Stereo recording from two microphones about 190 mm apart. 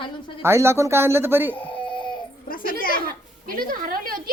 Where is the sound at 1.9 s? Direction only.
25° left (ahead or behind).